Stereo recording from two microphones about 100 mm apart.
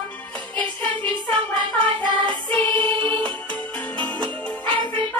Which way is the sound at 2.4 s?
15° left (ahead or behind).